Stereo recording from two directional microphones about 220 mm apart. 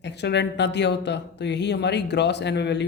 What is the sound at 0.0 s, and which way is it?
A woman's voice, 50° left (ahead or behind).